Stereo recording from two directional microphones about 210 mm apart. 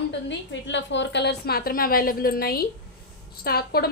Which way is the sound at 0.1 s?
60° left (ahead or behind).